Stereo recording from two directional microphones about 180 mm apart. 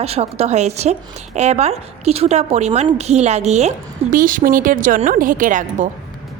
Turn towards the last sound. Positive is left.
turn(degrees=-45)  # may be behind; listen again after turning